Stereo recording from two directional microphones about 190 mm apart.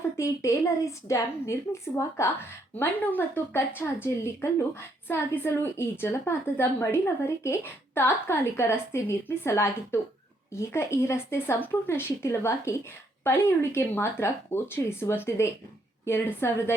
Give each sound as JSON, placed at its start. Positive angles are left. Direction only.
{"t": 0.2, "sound": "a woman's voice", "side_deg": 15}